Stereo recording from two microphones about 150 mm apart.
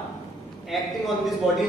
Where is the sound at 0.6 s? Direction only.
Centre (ahead or behind).